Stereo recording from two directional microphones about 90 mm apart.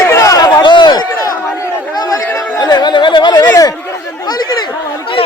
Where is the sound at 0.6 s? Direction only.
60° left (ahead or behind).